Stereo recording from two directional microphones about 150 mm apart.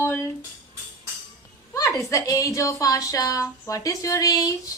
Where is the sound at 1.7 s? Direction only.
20° left (ahead or behind).